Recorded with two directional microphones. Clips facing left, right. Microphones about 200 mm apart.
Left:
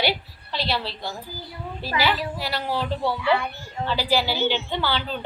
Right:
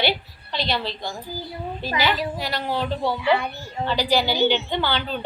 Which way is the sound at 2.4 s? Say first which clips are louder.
Right 1 dB; 5° left (ahead or behind).